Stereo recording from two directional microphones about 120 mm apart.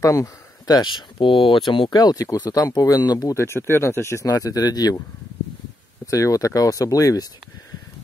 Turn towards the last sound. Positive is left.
turn(degrees=30)  # may be behind; listen again after turning